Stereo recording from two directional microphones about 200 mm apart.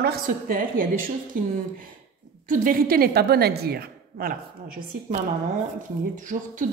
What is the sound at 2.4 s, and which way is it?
A woman's voice, 45° right (ahead or behind).